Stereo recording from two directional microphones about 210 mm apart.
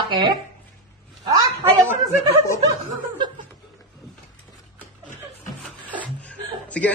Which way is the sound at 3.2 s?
20° right (ahead or behind).